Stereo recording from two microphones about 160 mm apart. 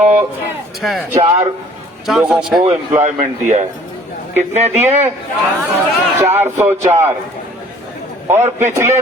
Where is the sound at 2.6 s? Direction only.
50° right (ahead or behind).